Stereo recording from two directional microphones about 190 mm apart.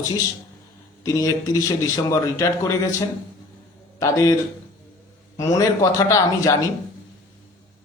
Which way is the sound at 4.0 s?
20° left (ahead or behind).